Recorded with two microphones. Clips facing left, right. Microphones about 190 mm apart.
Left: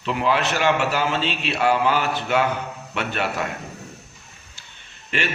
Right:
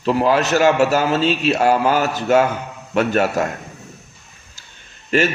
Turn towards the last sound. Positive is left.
turn(degrees=-40)  # may be behind; listen again after turning